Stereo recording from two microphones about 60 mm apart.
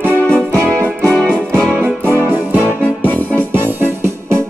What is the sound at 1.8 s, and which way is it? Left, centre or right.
Music, right.